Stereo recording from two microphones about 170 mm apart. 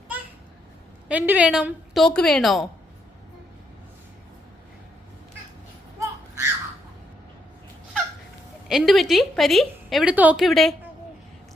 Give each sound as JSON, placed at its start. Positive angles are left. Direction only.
{"t": 1.0, "sound": "a woman's voice", "side_deg": -10}
{"t": 6.0, "sound": "a sound", "side_deg": -15}
{"t": 8.6, "sound": "a woman's voice", "side_deg": 0}